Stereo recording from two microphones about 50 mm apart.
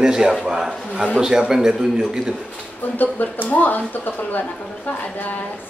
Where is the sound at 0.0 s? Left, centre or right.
Centre.